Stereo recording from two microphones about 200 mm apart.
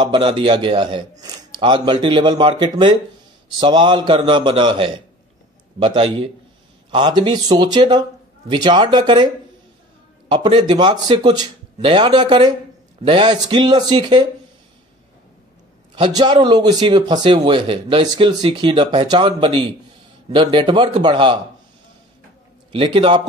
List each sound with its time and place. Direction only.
0.0 s a man's voice: 25° right (ahead or behind)
15.9 s a man's voice: 20° right (ahead or behind)
22.7 s a man's voice: 25° right (ahead or behind)